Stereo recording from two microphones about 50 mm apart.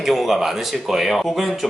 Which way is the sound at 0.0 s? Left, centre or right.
Centre.